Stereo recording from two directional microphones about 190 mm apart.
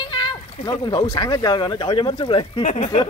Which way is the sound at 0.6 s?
20° left (ahead or behind).